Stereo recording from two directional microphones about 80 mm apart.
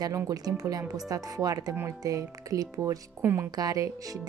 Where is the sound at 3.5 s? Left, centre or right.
Right.